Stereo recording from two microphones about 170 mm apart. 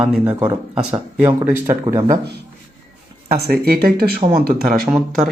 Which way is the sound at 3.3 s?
60° right (ahead or behind).